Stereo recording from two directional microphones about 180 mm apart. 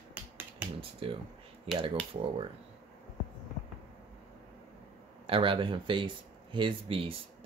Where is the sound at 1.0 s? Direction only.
30° right (ahead or behind).